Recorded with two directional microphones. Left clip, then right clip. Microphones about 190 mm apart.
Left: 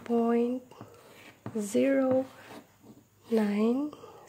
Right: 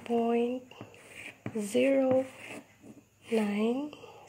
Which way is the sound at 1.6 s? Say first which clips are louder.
Even; 15° left (ahead or behind).